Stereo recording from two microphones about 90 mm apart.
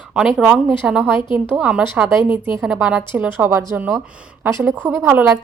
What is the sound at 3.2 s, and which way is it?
Speech, 20° right (ahead or behind).